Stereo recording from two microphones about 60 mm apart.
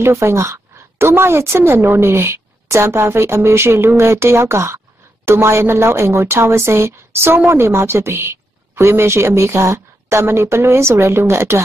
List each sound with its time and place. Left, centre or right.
0.0 s a woman's voice: right